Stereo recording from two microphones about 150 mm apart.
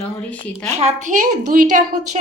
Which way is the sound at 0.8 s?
50° right (ahead or behind).